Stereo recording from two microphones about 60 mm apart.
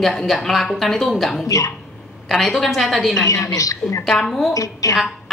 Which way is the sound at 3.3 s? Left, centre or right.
Left.